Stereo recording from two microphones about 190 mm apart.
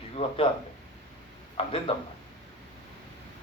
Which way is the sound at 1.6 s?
30° left (ahead or behind).